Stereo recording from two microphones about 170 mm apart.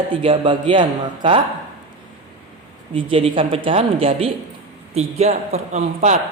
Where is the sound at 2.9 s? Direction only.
30° right (ahead or behind).